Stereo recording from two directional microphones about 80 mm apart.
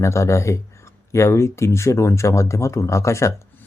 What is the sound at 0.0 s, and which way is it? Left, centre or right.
Speech, left.